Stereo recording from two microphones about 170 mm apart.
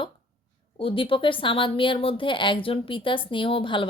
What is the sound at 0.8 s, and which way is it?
Speech, 30° left (ahead or behind).